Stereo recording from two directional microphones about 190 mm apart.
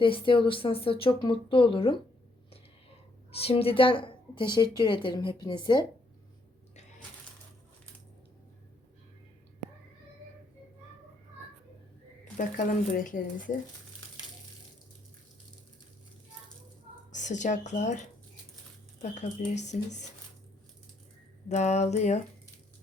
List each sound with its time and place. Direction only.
0.0 s a woman's voice: 25° left (ahead or behind)
3.3 s a woman's voice: 30° left (ahead or behind)
12.4 s speech: 45° left (ahead or behind)
17.1 s speech: 40° left (ahead or behind)
19.1 s speech: 40° left (ahead or behind)
21.5 s speech: 35° left (ahead or behind)